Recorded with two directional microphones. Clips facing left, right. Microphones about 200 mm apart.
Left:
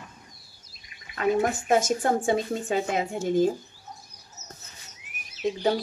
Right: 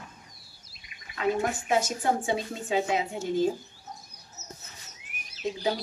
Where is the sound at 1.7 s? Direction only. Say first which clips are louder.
Left 3 dB; 50° left (ahead or behind).